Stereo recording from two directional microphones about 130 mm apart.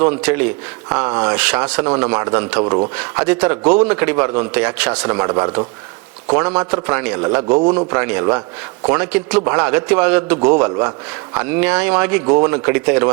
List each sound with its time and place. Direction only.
0.0 s a man's voice: 10° right (ahead or behind)
5.0 s a man's voice: 20° right (ahead or behind)
6.3 s a man's voice: 10° right (ahead or behind)
6.7 s a man's voice: 25° right (ahead or behind)
6.9 s a man's voice: 15° right (ahead or behind)
7.4 s a man's voice: 30° right (ahead or behind)
8.9 s a man's voice: 10° right (ahead or behind)